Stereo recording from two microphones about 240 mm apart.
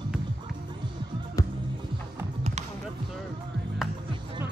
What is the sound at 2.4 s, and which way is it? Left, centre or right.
Basketball bounce, right.